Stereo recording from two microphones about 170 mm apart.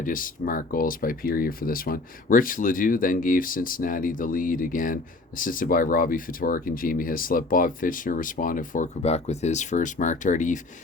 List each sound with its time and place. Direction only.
0.0 s speech: 55° left (ahead or behind)